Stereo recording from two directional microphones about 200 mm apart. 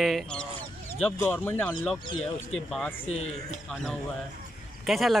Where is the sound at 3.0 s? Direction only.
30° left (ahead or behind).